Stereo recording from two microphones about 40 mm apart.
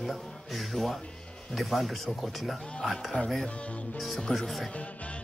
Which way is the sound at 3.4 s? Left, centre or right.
Left.